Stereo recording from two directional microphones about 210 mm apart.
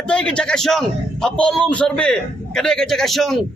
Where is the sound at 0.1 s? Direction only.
5° left (ahead or behind).